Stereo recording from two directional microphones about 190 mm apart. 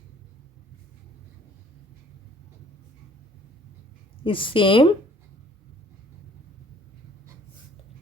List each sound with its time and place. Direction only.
4.2 s speech: 25° left (ahead or behind)